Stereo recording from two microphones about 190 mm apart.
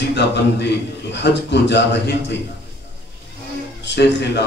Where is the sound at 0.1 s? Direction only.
65° left (ahead or behind).